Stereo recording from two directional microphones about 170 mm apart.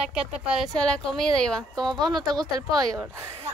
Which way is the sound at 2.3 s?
25° right (ahead or behind).